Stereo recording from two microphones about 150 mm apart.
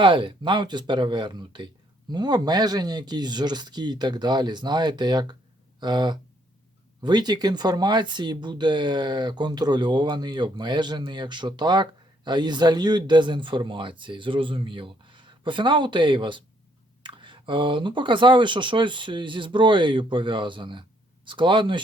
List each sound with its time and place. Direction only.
0.0 s speech: 35° right (ahead or behind)